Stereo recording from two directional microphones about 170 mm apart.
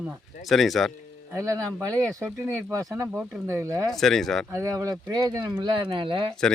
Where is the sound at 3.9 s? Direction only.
Centre (ahead or behind).